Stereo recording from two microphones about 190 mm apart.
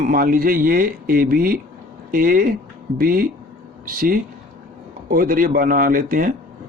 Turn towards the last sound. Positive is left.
turn(degrees=-45)  # may be behind; listen again after turning